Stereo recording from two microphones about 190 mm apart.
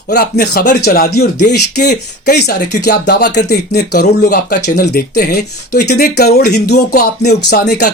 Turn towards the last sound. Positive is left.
turn(degrees=60)  # may be behind; listen again after turning